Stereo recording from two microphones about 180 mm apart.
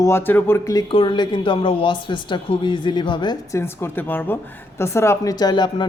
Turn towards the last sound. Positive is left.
turn(degrees=25)  # may be behind; listen again after turning